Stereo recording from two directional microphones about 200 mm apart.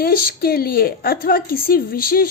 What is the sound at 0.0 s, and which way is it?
A woman's voice, 50° left (ahead or behind).